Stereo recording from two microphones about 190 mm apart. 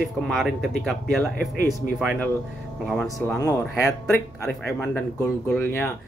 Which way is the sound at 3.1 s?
15° left (ahead or behind).